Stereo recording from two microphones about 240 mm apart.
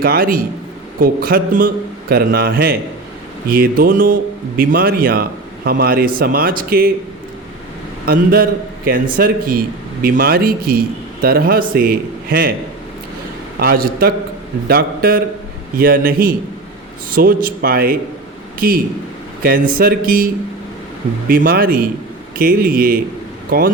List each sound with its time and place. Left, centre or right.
0.0 s a man's voice: right
8.0 s a man's voice: right
13.6 s a man's voice: right